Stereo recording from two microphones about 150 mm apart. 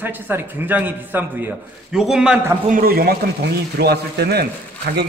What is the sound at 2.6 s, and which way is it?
Speech, 70° right (ahead or behind).